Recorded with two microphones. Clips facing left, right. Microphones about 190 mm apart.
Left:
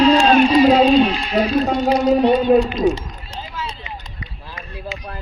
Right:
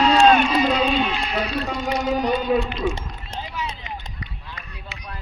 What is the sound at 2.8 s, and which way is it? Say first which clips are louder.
Baby cry: left 7 dB; 40° left (ahead or behind).